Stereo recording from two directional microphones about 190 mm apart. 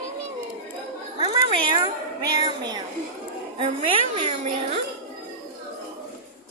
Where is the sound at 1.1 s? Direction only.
25° right (ahead or behind).